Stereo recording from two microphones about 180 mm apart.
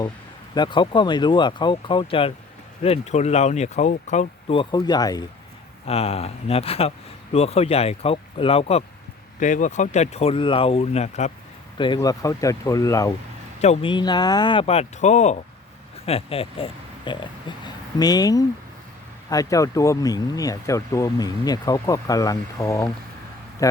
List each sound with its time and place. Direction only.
0.5 s speech: 25° left (ahead or behind)
5.8 s speech: 35° left (ahead or behind)
11.9 s speech: 20° left (ahead or behind)
13.6 s speech: 35° left (ahead or behind)
13.9 s speech: 25° left (ahead or behind)